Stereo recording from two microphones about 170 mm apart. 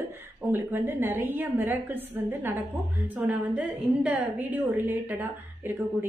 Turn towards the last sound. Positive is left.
turn(degrees=-10)  # may be behind; listen again after turning